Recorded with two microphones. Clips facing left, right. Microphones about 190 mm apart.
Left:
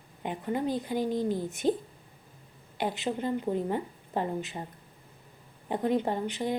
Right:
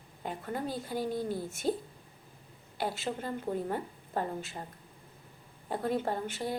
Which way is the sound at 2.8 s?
15° left (ahead or behind).